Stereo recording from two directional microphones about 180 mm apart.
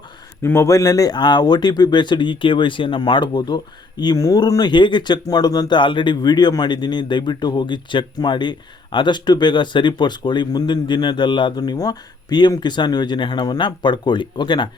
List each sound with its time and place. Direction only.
0.4 s speech: 15° left (ahead or behind)